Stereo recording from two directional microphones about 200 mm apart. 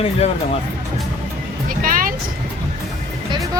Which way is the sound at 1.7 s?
45° right (ahead or behind).